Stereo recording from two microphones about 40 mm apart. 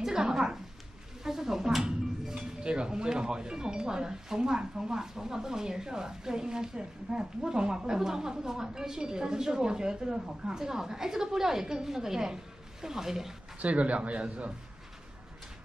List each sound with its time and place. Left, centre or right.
0.0 s a sound: centre
1.2 s speech: centre
13.6 s a man's voice: right